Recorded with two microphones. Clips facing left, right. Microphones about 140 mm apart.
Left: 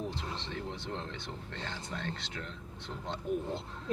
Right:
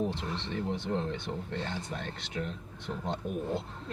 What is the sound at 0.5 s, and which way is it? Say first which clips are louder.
Speech: right 10 dB; 15° right (ahead or behind).